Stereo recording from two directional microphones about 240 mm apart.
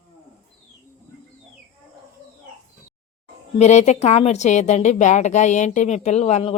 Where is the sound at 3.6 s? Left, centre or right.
Left.